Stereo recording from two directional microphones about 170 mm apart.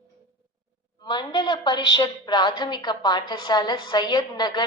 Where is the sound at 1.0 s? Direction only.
25° left (ahead or behind).